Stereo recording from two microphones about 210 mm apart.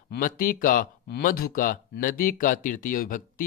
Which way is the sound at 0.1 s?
40° left (ahead or behind).